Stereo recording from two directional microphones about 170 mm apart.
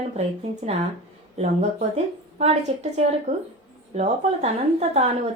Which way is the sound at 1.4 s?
40° right (ahead or behind).